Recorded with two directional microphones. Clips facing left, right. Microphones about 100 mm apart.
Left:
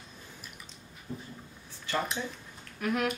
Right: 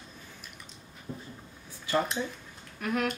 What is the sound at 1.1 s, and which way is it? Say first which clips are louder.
Writing: even; 35° right (ahead or behind).